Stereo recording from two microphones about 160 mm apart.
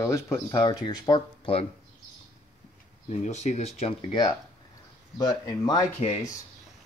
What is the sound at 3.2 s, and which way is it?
Speech, 45° left (ahead or behind).